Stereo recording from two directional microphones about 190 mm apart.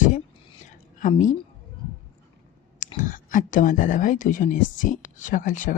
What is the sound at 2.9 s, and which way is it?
Speech, 45° left (ahead or behind).